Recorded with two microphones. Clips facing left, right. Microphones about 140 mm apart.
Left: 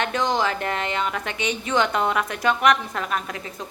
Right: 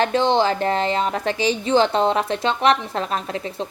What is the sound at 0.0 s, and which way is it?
A woman's voice, 30° right (ahead or behind).